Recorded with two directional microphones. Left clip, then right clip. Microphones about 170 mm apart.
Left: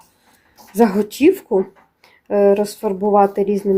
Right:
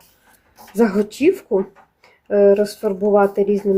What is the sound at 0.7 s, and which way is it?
Speech, 10° left (ahead or behind).